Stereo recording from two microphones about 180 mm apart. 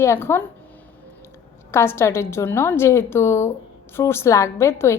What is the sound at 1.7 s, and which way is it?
Speech, 15° left (ahead or behind).